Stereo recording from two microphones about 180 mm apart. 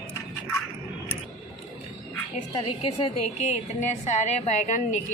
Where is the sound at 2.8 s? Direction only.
30° left (ahead or behind).